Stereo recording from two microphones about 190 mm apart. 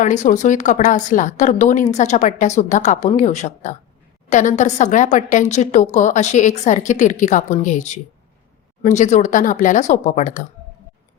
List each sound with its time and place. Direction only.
0.0 s speech: 40° left (ahead or behind)